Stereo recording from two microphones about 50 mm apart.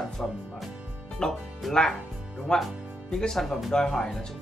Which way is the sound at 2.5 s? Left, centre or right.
Centre.